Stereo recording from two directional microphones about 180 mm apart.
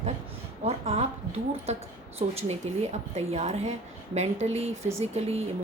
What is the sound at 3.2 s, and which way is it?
Speech, 35° right (ahead or behind).